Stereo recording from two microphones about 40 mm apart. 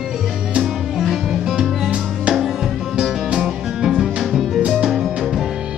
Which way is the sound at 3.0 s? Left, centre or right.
Right.